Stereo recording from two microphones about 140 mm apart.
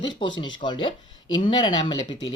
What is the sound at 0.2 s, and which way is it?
Speech, 35° left (ahead or behind).